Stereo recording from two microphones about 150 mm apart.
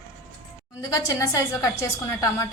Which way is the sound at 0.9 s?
20° left (ahead or behind).